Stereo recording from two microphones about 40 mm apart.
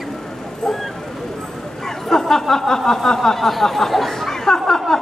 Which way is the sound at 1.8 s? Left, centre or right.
Centre.